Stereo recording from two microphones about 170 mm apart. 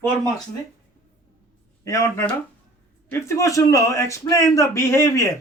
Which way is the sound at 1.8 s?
15° left (ahead or behind).